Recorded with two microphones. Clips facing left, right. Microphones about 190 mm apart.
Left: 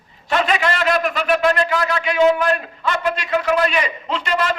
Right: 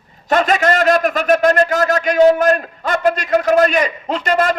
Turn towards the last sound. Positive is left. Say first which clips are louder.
# right 5 dB
turn(degrees=-45)  # may be behind; listen again after turning